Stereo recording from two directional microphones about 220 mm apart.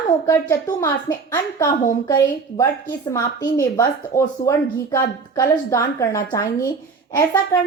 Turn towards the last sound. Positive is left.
turn(degrees=20)  # may be behind; listen again after turning